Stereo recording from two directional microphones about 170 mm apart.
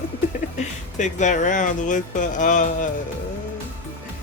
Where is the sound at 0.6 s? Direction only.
45° left (ahead or behind).